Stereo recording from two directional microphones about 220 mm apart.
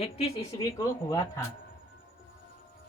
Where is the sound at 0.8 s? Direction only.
15° left (ahead or behind).